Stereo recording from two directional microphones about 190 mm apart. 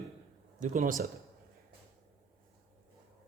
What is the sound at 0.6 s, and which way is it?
Speech, 40° right (ahead or behind).